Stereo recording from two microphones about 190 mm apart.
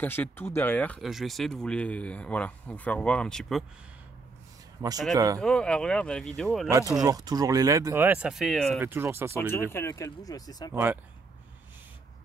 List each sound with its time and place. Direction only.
0.0 s speech: 10° left (ahead or behind)
4.8 s speech: 20° right (ahead or behind)
5.4 s speech: 5° left (ahead or behind)
6.7 s speech: 15° right (ahead or behind); by 8.7 s centre (ahead or behind)
8.7 s speech: 10° right (ahead or behind)
9.5 s speech: 15° left (ahead or behind)
10.7 s speech: 10° right (ahead or behind)